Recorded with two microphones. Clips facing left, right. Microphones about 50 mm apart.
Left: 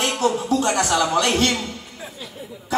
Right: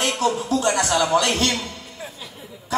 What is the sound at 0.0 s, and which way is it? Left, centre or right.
A man's voice, left.